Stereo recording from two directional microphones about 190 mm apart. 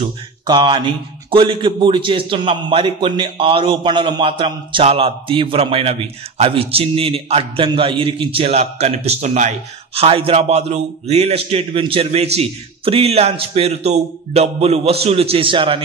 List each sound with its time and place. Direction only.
0.5 s a man's voice: 25° right (ahead or behind)